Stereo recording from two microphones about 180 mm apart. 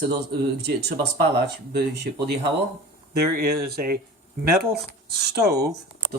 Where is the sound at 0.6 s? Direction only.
65° right (ahead or behind).